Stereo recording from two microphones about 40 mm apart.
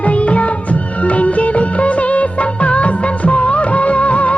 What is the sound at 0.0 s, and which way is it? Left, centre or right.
Music of bollywood, left.